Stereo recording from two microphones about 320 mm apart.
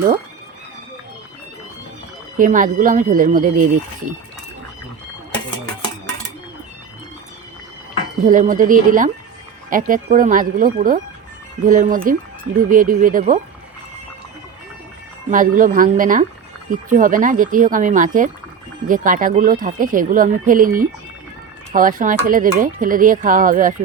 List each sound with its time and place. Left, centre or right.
2.4 s speech: right
8.2 s speech: right
15.3 s speech: right